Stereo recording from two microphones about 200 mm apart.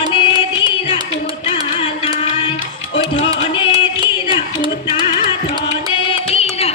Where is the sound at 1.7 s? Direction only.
25° left (ahead or behind).